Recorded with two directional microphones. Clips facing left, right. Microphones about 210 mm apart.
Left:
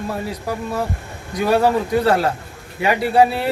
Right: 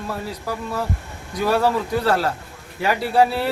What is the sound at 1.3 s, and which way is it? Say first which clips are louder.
Speech: left 3 dB; 20° left (ahead or behind).